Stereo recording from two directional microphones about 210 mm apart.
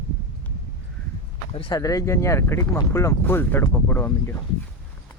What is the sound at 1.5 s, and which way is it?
Speech, 25° left (ahead or behind).